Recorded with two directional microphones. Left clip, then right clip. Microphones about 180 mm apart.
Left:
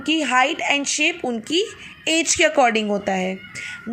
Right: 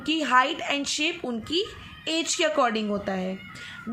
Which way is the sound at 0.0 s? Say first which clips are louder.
Left 4 dB; 15° left (ahead or behind).